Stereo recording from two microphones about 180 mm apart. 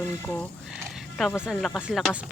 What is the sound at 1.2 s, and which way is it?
Speech, centre (ahead or behind).